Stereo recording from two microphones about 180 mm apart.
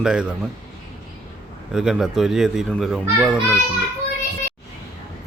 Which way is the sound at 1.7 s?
5° right (ahead or behind).